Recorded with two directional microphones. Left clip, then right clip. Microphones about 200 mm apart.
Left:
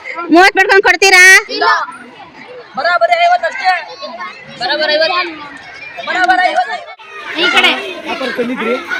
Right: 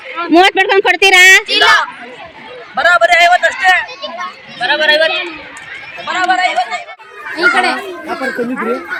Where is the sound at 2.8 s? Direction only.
50° left (ahead or behind).